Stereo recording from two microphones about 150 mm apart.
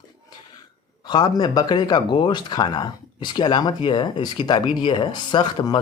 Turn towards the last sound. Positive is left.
turn(degrees=30)  # may be behind; listen again after turning